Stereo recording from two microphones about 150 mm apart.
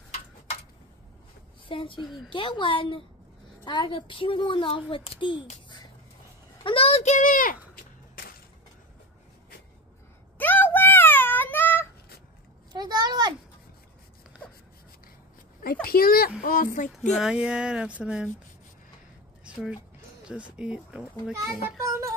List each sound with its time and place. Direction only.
1.7 s speech: 35° left (ahead or behind)
6.6 s a child's voice: 40° left (ahead or behind); by 7.5 s 65° left (ahead or behind)
10.3 s meow: 10° left (ahead or behind)
12.7 s a sound: 25° right (ahead or behind)
15.6 s speech: 80° left
16.4 s speech: 65° left (ahead or behind)
17.2 s speech: 5° right (ahead or behind)
19.4 s speech: 5° right (ahead or behind)
21.8 s a sound: 20° right (ahead or behind)